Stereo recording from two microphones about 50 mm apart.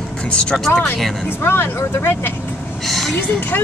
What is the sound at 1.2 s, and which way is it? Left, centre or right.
Speech, left.